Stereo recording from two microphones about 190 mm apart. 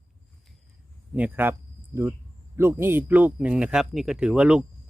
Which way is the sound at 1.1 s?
10° right (ahead or behind).